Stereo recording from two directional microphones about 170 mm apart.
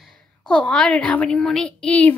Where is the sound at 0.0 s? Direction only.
5° left (ahead or behind).